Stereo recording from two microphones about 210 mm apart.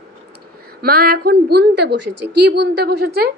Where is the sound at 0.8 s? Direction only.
45° right (ahead or behind).